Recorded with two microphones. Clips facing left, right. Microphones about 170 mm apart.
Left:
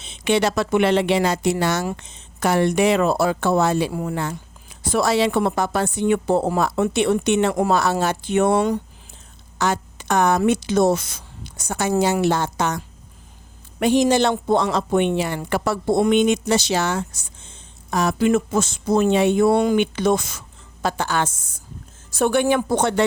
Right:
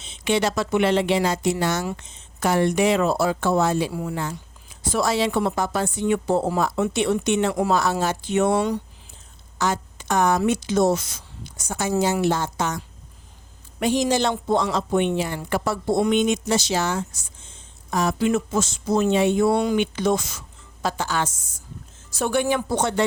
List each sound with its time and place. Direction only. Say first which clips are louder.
0.0 s a woman's voice: left 3 dB; 65° left (ahead or behind)
3.9 s a woman's voice: left 3 dB; 55° left (ahead or behind)
7.8 s a woman's voice: left 2 dB; 65° left (ahead or behind); by 8.8 s 50° left (ahead or behind)
9.6 s a woman's voice: left 2 dB; 65° left (ahead or behind)